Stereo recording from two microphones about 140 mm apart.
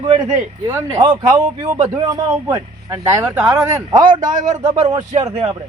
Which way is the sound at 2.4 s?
20° right (ahead or behind).